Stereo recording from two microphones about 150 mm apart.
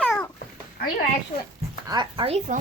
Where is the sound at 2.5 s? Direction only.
60° right (ahead or behind).